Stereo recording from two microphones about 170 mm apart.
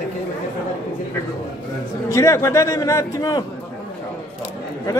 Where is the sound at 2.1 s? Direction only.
20° left (ahead or behind).